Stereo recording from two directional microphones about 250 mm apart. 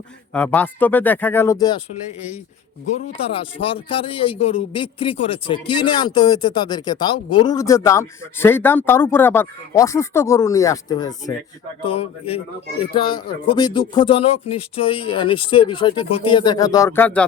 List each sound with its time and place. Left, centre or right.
0.3 s speech: centre
3.2 s speech: left; by 17.2 s centre